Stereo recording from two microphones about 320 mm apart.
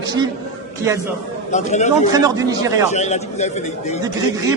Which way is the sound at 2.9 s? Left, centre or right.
Left.